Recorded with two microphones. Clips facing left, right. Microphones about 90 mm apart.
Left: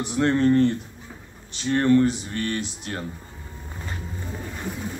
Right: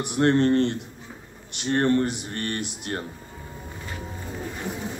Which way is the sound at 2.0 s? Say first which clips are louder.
Left 4 dB; 55° right (ahead or behind).